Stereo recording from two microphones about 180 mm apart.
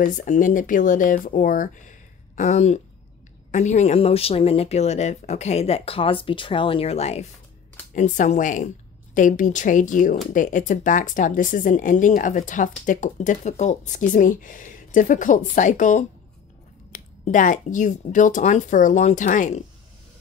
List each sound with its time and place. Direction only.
0.0 s speech: 45° left (ahead or behind)